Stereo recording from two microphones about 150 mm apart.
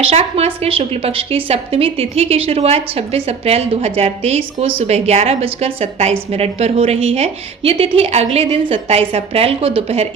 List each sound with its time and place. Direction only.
0.1 s a woman's voice: 40° right (ahead or behind)